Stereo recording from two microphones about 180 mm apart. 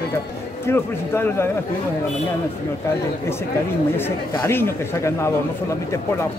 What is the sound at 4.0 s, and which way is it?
Speech, 15° left (ahead or behind).